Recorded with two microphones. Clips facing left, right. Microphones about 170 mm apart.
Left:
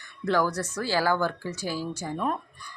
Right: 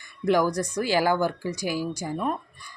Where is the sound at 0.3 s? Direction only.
15° right (ahead or behind).